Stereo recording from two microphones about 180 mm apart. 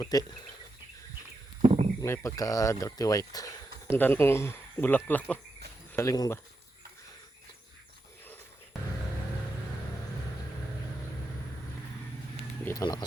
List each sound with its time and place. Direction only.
0.0 s speech: 20° left (ahead or behind)
1.6 s a sound: 40° right (ahead or behind)
2.0 s speech: 15° left (ahead or behind)
12.6 s speech: 20° left (ahead or behind)